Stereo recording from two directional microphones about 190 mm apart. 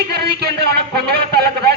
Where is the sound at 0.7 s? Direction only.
55° right (ahead or behind).